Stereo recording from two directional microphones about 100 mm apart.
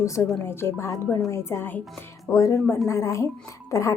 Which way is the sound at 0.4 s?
25° left (ahead or behind).